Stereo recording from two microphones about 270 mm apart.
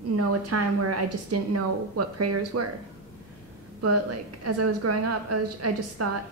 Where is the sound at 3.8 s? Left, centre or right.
Right.